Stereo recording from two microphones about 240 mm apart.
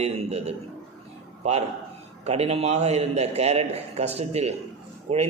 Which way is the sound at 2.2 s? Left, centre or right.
Right.